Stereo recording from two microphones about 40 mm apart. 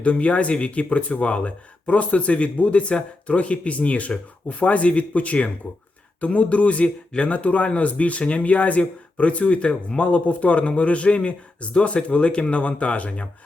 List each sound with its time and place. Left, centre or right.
0.0 s speech: left